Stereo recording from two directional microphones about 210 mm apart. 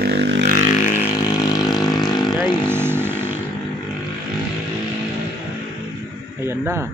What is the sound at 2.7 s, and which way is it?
Vehicle, 10° right (ahead or behind).